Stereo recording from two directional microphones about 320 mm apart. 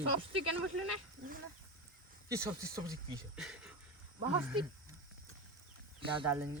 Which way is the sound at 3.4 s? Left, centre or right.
Centre.